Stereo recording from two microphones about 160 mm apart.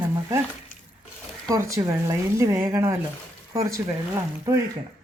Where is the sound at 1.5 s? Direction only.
20° right (ahead or behind).